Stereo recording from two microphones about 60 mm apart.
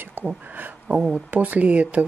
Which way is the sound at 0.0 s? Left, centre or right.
Right.